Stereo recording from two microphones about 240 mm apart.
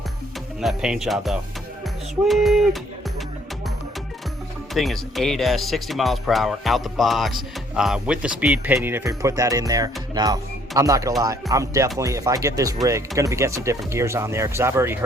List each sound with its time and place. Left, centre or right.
0.6 s speech: centre
4.7 s speech: centre